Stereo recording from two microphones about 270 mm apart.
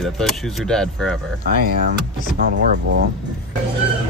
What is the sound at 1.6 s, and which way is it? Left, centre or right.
Speech, right.